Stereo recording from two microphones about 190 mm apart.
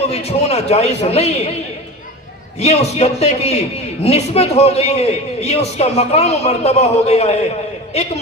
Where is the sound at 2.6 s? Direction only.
35° left (ahead or behind).